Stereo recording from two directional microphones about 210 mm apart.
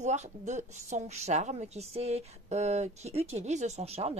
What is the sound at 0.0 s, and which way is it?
A woman's voice, 35° right (ahead or behind).